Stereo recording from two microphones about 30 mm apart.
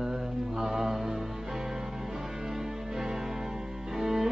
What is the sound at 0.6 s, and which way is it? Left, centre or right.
Mantra, centre.